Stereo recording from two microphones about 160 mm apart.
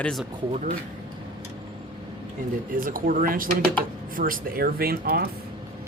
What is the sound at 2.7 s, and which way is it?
Speech, 60° right (ahead or behind).